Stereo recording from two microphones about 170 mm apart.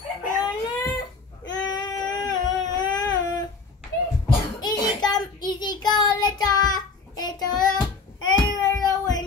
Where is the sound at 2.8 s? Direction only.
25° left (ahead or behind).